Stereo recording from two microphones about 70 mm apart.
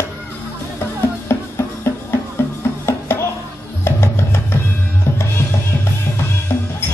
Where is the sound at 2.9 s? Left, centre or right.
Left.